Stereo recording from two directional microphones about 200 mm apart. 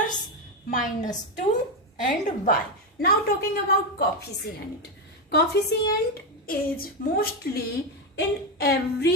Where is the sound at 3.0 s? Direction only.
50° left (ahead or behind).